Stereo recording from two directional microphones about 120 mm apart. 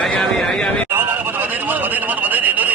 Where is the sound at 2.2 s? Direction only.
15° right (ahead or behind).